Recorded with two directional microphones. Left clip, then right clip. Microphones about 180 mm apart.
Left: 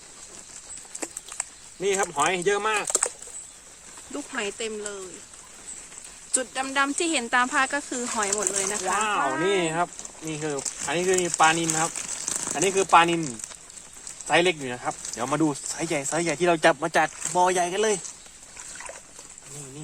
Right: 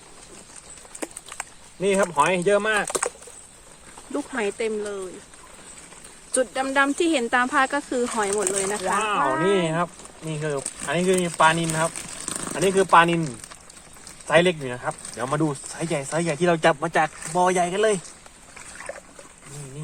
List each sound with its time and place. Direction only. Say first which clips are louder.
0.9 s a sound: right 2 dB; 10° right (ahead or behind)
1.8 s speech: right 4 dB; 35° left (ahead or behind)
2.8 s a sound: right 2 dB; 20° right (ahead or behind)
4.1 s speech: right 4 dB; 15° right (ahead or behind)
6.3 s speech: right 5 dB; 10° right (ahead or behind)
9.0 s speech: right 1 dB; 35° left (ahead or behind)
9.2 s speech: right 3 dB; centre (ahead or behind)
9.6 s speech: right 1 dB; 40° left (ahead or behind)
11.9 s a sound: left 1 dB; centre (ahead or behind)
12.6 s speech: right 2 dB; 35° left (ahead or behind)
14.3 s speech: right 3 dB; 40° left (ahead or behind)